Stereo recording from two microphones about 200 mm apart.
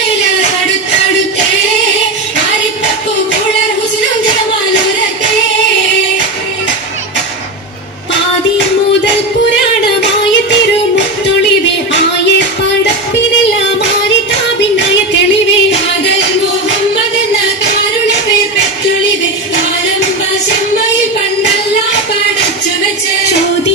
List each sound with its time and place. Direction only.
11.9 s music: 60° left (ahead or behind)